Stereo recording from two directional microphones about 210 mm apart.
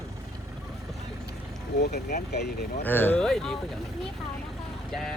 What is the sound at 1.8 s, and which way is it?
Speech, 50° left (ahead or behind).